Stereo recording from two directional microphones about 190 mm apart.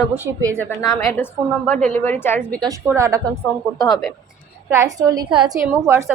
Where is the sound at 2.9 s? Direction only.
15° right (ahead or behind).